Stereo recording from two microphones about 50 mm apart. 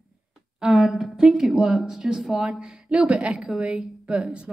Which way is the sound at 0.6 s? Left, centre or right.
Centre.